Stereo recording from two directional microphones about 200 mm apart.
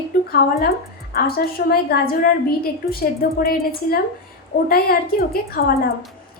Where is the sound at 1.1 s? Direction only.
50° left (ahead or behind).